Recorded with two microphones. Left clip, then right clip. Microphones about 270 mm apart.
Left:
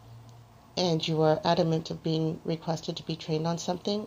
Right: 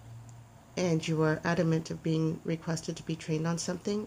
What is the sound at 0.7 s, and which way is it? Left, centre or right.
Speech, right.